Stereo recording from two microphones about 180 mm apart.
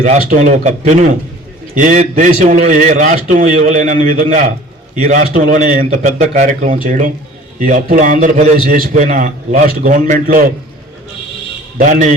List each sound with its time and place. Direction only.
0.0 s a man's voice: 45° right (ahead or behind)
11.8 s a man's voice: 45° right (ahead or behind)